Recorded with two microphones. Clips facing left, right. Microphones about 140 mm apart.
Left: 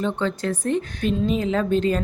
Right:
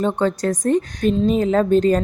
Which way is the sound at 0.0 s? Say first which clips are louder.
Right 5 dB; 45° right (ahead or behind).